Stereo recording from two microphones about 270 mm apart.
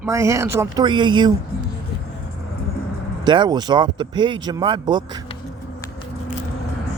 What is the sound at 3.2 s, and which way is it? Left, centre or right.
Speech, centre.